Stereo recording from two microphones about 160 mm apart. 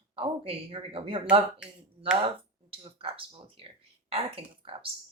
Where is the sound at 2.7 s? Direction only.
35° right (ahead or behind).